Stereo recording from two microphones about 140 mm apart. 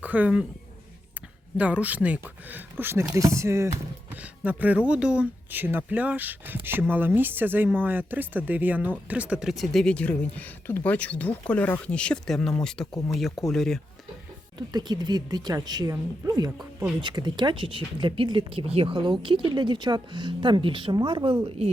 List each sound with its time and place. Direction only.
0.0 s speech: 10° right (ahead or behind)
1.5 s speech: 10° right (ahead or behind)
14.7 s speech: 30° right (ahead or behind)